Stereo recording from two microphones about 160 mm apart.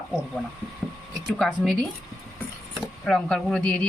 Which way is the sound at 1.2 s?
Centre (ahead or behind).